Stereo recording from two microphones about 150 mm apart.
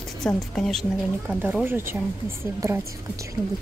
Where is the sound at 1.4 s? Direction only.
15° right (ahead or behind).